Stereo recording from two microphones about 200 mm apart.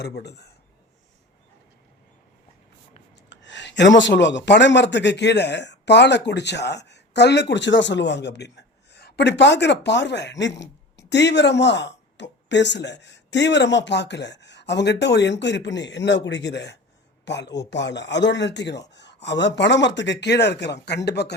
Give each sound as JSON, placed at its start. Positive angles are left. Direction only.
{"t": 0.0, "sound": "a man's voice", "side_deg": 55}
{"t": 3.2, "sound": "a man's voice", "side_deg": 65}